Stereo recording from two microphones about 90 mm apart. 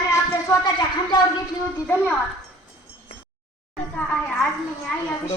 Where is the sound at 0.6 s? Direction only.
55° left (ahead or behind).